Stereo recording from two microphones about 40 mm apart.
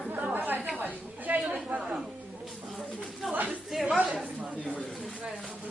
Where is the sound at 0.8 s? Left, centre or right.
Right.